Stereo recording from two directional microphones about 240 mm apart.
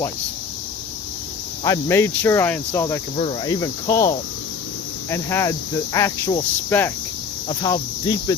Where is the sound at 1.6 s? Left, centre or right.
Centre.